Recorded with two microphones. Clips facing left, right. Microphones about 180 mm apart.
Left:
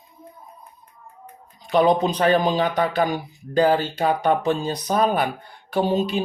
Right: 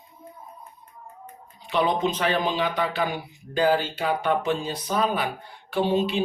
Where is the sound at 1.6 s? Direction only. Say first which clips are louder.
Left 5 dB; 40° left (ahead or behind).